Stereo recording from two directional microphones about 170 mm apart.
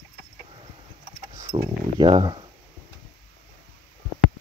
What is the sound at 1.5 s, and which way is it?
Speech, 25° right (ahead or behind).